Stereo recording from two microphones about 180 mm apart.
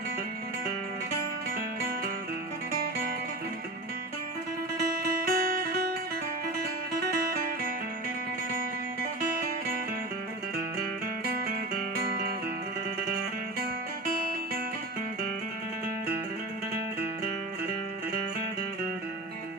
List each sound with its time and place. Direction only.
5.0 s music: 55° right (ahead or behind)
7.2 s music: 55° right (ahead or behind)